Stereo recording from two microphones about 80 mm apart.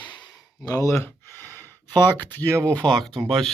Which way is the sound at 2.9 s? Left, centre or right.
Centre.